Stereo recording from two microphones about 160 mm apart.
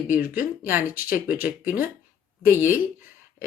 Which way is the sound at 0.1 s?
10° right (ahead or behind).